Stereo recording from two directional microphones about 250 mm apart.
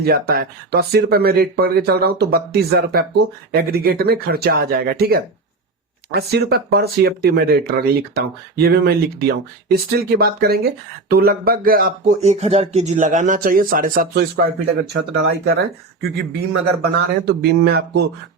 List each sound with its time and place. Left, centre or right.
0.0 s speech: right